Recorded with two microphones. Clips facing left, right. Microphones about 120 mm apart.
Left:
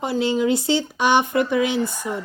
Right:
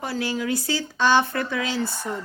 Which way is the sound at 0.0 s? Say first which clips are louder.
Left 6 dB; 20° left (ahead or behind).